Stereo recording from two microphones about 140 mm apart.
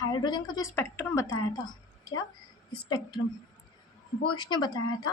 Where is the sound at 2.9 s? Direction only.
30° left (ahead or behind).